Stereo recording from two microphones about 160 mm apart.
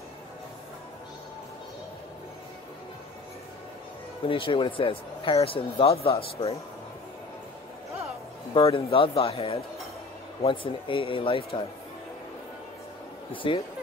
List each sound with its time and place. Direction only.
4.3 s speech: 35° left (ahead or behind)
8.5 s speech: 35° left (ahead or behind)
13.3 s speech: 30° left (ahead or behind)